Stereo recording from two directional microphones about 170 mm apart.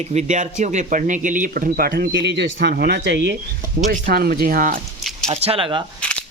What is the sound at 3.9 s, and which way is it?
Speech, 65° right (ahead or behind).